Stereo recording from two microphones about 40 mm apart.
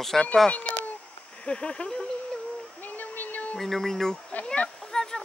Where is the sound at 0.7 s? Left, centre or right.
Left.